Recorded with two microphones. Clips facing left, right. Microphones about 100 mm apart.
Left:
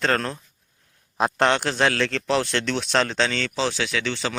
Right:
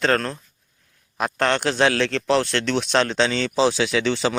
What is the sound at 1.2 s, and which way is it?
Speech, 20° left (ahead or behind).